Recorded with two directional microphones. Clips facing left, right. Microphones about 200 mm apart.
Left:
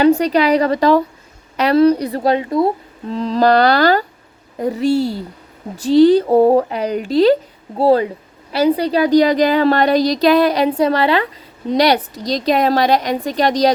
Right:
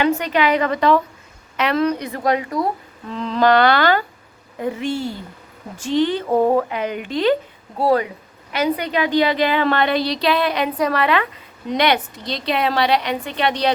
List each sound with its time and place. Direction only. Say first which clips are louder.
0.0 s a woman's voice: left 6 dB; 35° left (ahead or behind)